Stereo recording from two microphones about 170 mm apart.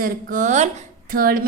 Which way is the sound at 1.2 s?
60° right (ahead or behind).